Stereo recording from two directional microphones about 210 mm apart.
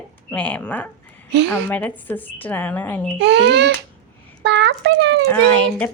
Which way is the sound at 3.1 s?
55° right (ahead or behind).